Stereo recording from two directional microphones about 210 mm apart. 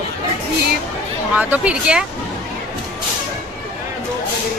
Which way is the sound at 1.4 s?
5° right (ahead or behind).